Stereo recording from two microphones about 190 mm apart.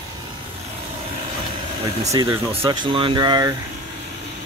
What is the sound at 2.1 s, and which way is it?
Speech, 15° right (ahead or behind).